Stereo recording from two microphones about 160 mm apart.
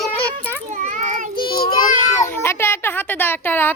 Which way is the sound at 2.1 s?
15° left (ahead or behind).